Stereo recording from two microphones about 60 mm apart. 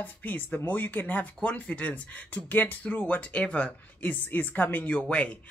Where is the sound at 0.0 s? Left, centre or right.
Left.